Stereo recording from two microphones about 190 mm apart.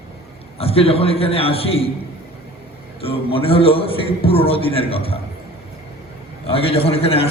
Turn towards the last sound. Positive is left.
turn(degrees=30)  # may be behind; listen again after turning